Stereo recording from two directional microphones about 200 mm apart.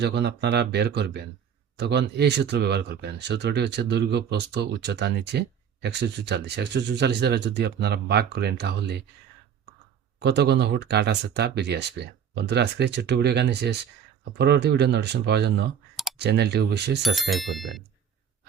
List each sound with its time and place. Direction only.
0.0 s speech: 55° right (ahead or behind)
10.2 s speech: 55° right (ahead or behind)
17.2 s speech: centre (ahead or behind)